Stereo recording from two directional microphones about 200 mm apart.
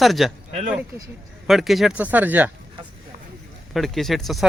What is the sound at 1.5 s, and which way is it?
Speech, centre (ahead or behind).